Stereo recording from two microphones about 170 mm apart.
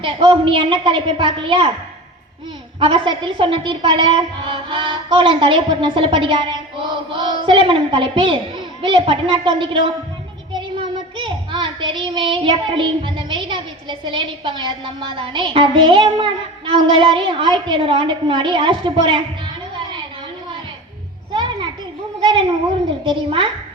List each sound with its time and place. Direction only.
0.0 s a child's voice: 30° right (ahead or behind)
2.8 s a woman's voice: 30° right (ahead or behind)
10.5 s child singing: 30° right (ahead or behind)
14.0 s a woman's voice: 30° right (ahead or behind)
19.7 s a sound: 30° right (ahead or behind)
22.2 s a sound: 30° right (ahead or behind)
23.0 s a woman's voice: 30° right (ahead or behind)